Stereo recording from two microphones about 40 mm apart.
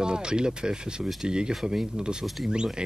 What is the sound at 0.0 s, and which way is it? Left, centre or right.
Speech, centre.